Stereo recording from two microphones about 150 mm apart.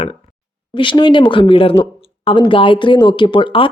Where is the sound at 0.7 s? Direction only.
35° left (ahead or behind).